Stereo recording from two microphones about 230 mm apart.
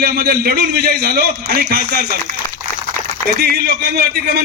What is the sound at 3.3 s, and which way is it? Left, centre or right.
A man's voice, right.